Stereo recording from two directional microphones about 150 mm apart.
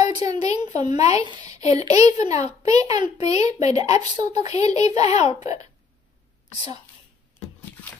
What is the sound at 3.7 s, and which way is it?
Speech, 25° right (ahead or behind).